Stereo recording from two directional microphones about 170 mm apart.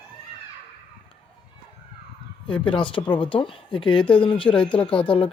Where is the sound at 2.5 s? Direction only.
30° left (ahead or behind).